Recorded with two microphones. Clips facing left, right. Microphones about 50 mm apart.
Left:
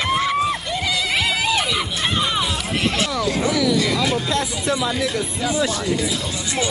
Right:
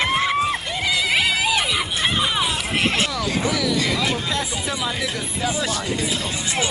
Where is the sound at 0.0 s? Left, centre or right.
Right.